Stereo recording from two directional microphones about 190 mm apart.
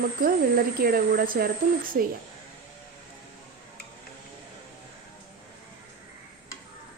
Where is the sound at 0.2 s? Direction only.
50° right (ahead or behind).